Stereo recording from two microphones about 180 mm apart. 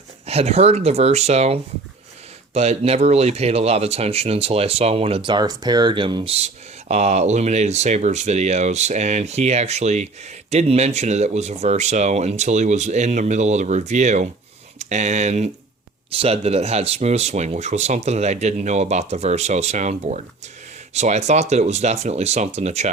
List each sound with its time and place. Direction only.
0.3 s speech: 35° right (ahead or behind)
6.3 s speech: 35° right (ahead or behind)